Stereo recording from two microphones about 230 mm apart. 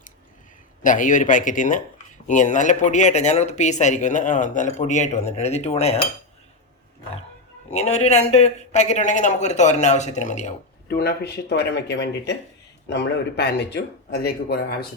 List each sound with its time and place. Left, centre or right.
0.8 s speech: left
7.7 s speech: left
10.9 s speech: left